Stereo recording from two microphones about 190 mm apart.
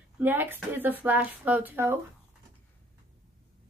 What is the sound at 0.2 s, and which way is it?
Speech, 10° right (ahead or behind).